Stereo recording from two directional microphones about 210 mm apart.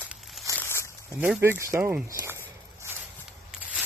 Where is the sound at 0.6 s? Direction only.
10° left (ahead or behind).